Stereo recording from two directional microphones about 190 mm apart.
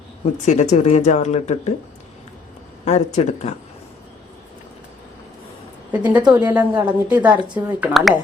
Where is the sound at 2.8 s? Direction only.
35° left (ahead or behind).